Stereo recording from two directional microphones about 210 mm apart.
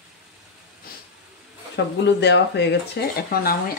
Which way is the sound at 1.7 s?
55° left (ahead or behind).